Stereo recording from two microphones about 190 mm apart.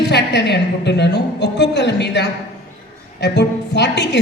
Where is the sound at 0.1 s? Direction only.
65° left (ahead or behind).